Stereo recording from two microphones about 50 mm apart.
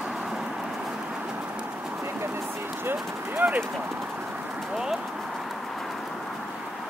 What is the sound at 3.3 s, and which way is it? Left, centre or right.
Clip-clop, right.